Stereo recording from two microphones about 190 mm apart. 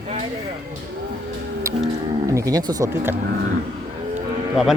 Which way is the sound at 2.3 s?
15° right (ahead or behind).